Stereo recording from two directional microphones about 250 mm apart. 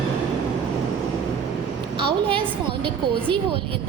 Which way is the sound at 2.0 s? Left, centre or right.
Right.